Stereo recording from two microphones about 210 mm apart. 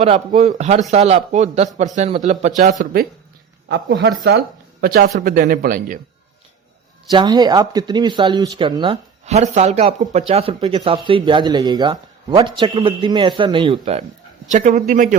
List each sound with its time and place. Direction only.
0.3 s speech: 35° right (ahead or behind)
3.7 s speech: 55° right (ahead or behind)
7.1 s speech: 20° right (ahead or behind)
14.5 s speech: 35° right (ahead or behind)